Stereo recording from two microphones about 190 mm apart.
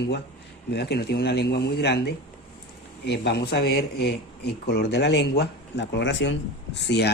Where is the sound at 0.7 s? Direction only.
60° left (ahead or behind).